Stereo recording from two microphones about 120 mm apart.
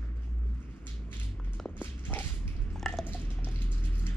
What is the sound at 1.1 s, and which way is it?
Walk, 15° left (ahead or behind).